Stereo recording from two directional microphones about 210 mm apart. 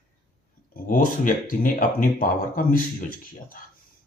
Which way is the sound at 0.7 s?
40° left (ahead or behind).